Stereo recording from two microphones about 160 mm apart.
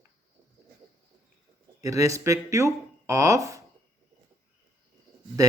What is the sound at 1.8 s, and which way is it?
Speech, 20° right (ahead or behind).